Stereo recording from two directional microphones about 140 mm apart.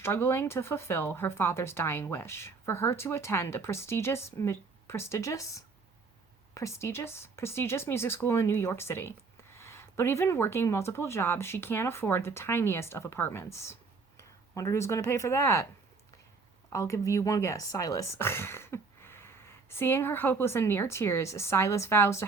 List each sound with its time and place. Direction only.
0.0 s speech: 15° left (ahead or behind)
16.6 s speech: 20° left (ahead or behind)